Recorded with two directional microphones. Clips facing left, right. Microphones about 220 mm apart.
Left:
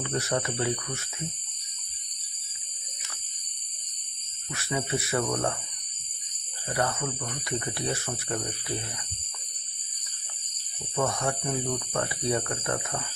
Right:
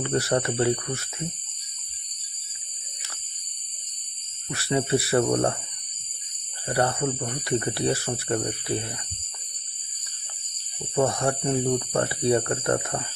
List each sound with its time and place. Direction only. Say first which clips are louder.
0.0 s speech: right 5 dB; 35° right (ahead or behind)
4.5 s speech: right 7 dB; 35° right (ahead or behind)
6.7 s speech: right 5 dB; 35° right (ahead or behind)
10.9 s speech: right 5 dB; 35° right (ahead or behind)